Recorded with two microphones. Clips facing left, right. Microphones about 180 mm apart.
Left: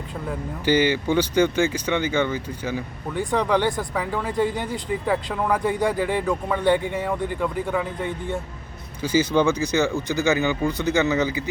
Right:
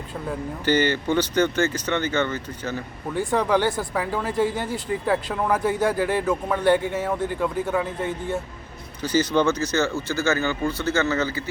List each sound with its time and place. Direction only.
0.6 s speech: 10° left (ahead or behind)
3.2 s speech: 5° right (ahead or behind)
4.5 s speech: 20° left (ahead or behind)
5.0 s speech: 5° right (ahead or behind)
9.0 s speech: 10° left (ahead or behind)